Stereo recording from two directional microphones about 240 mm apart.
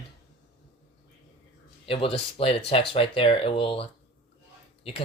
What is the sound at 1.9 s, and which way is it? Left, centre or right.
Speech, left.